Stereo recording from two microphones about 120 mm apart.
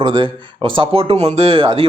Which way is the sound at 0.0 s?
45° right (ahead or behind).